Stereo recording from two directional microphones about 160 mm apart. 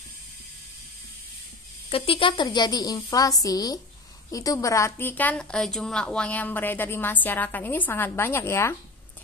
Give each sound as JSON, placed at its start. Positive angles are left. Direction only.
{"t": 1.9, "sound": "a woman's voice", "side_deg": 35}